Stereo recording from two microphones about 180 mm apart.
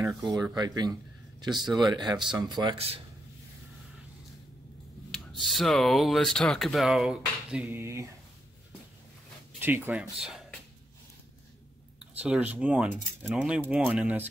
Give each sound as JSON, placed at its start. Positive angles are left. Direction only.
{"t": 0.4, "sound": "speech", "side_deg": -20}
{"t": 1.6, "sound": "speech", "side_deg": 0}
{"t": 1.9, "sound": "speech", "side_deg": -20}
{"t": 5.4, "sound": "speech", "side_deg": 0}
{"t": 9.6, "sound": "speech", "side_deg": -10}
{"t": 12.2, "sound": "speech", "side_deg": -5}